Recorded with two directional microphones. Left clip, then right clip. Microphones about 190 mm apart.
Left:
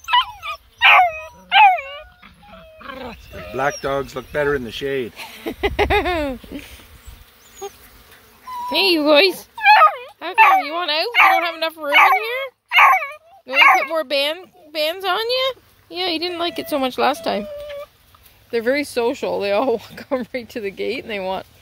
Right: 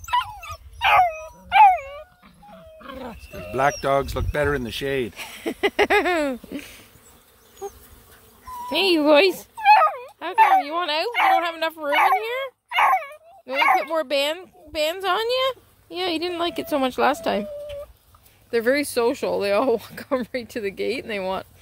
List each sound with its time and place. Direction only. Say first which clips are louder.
0.0 s dog: left 6 dB; 20° right (ahead or behind)
0.8 s dog: left 5 dB; 10° right (ahead or behind)
2.2 s dog: left 3 dB; 5° left (ahead or behind)
3.8 s speech: right 1 dB; 55° right (ahead or behind)
5.1 s speech: left 1 dB; centre (ahead or behind)
8.6 s dog: left 2 dB; centre (ahead or behind)
18.5 s speech: left 1 dB; 5° left (ahead or behind)